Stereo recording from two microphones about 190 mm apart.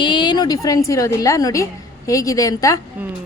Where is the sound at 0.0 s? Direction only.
25° left (ahead or behind).